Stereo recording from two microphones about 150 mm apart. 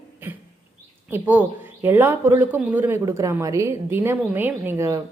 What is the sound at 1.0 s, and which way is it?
A woman's voice, 15° right (ahead or behind).